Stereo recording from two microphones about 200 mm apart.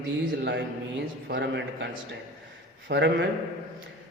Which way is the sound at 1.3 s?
60° right (ahead or behind).